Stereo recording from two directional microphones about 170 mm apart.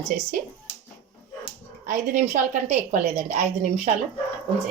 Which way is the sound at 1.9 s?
45° right (ahead or behind).